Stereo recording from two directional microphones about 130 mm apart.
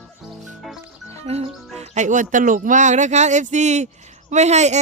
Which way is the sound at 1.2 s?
55° right (ahead or behind).